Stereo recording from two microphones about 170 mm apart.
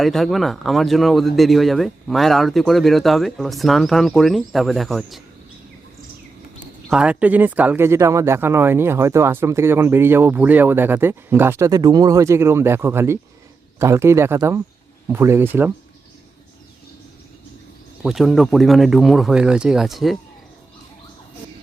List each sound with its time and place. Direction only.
0.0 s speech: centre (ahead or behind)
6.9 s speech: 5° right (ahead or behind)
18.0 s speech: centre (ahead or behind)